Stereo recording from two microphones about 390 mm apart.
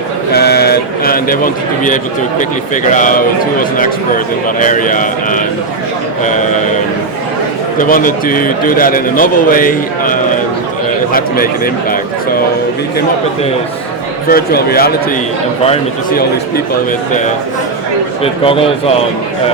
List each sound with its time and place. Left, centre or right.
0.3 s a sound: left
2.9 s a man's voice: centre
7.8 s a man's voice: left
14.3 s a man's voice: left
18.2 s a man's voice: centre